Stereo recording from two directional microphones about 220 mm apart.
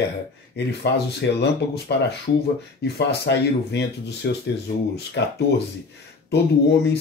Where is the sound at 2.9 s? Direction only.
50° left (ahead or behind).